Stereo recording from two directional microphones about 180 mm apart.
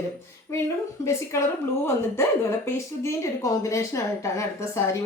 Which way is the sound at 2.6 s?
15° left (ahead or behind).